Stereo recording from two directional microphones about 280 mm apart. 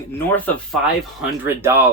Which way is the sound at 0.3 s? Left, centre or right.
Centre.